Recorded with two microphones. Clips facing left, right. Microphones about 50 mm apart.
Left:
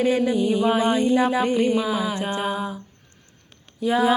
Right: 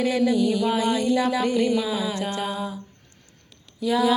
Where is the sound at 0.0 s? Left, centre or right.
Left.